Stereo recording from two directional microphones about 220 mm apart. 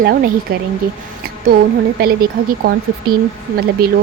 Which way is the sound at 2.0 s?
45° right (ahead or behind).